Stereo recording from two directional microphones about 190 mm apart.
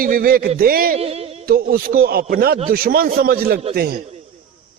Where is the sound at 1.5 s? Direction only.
50° right (ahead or behind).